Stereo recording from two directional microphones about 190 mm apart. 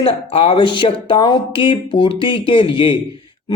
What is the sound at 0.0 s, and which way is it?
Speech, 30° left (ahead or behind).